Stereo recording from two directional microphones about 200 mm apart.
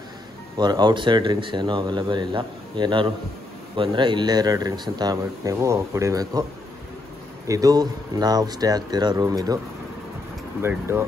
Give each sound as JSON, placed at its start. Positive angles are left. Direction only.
{"t": 0.6, "sound": "speech", "side_deg": -20}
{"t": 7.4, "sound": "speech", "side_deg": -15}
{"t": 10.6, "sound": "speech", "side_deg": -10}